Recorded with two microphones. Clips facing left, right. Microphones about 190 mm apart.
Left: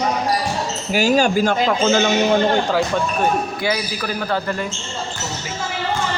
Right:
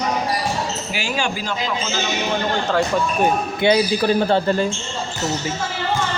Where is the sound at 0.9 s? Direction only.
40° left (ahead or behind).